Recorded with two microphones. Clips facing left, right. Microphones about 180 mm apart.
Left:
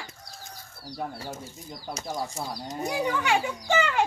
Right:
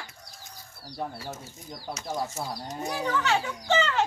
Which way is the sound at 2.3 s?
15° left (ahead or behind).